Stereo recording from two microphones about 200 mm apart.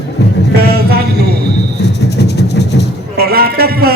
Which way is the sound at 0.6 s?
50° right (ahead or behind).